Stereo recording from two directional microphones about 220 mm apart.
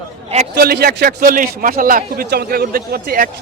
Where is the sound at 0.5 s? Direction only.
45° right (ahead or behind).